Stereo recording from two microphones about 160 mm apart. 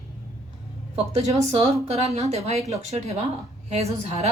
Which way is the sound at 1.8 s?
40° right (ahead or behind).